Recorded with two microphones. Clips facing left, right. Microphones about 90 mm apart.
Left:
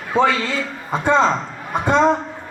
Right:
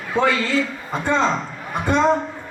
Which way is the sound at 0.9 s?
20° left (ahead or behind).